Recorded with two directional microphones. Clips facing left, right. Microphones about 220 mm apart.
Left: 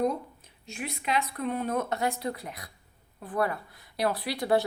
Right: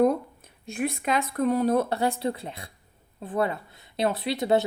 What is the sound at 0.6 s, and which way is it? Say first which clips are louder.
Speech: right 8 dB; 50° right (ahead or behind).